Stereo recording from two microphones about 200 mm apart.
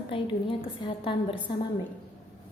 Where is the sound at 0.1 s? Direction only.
25° left (ahead or behind).